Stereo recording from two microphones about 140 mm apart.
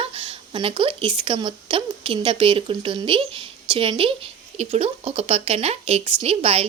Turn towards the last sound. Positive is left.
turn(degrees=-45)  # may be behind; listen again after turning